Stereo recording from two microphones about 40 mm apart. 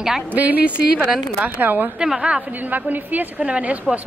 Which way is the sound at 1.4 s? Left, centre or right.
Right.